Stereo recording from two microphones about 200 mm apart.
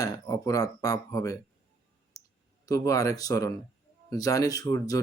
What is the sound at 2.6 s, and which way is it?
Speech, 15° left (ahead or behind).